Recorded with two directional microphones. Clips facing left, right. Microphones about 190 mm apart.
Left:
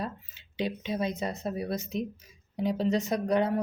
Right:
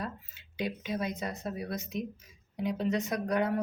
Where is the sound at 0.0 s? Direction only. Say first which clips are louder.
Left 3 dB; 25° left (ahead or behind).